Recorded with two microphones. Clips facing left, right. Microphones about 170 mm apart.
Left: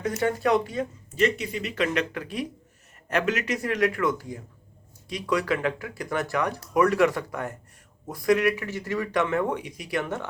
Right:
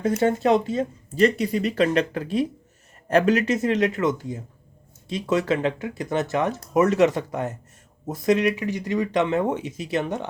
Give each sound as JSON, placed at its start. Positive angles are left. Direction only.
{"t": 0.0, "sound": "speech", "side_deg": -25}